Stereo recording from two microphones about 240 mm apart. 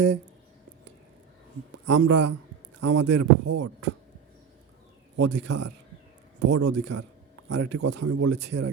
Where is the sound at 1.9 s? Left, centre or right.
Right.